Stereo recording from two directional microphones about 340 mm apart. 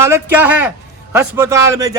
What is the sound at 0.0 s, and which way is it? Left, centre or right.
A man's voice, centre.